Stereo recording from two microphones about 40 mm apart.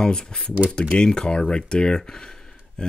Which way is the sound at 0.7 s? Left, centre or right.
Left.